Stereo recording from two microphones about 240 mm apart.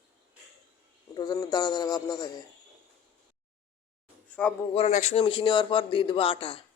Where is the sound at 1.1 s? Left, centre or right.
Centre.